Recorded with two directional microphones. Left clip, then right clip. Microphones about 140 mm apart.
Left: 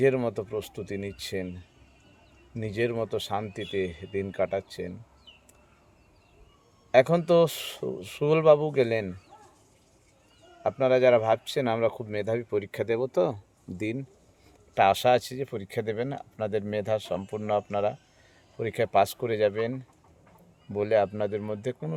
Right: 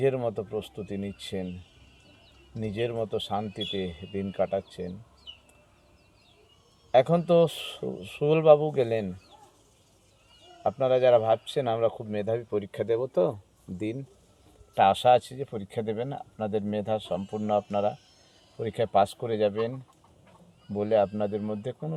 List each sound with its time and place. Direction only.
0.0 s speech: 30° left (ahead or behind)
2.6 s a man's voice: 30° left (ahead or behind)
6.9 s a man's voice: 30° left (ahead or behind)
10.6 s a man's voice: 30° left (ahead or behind)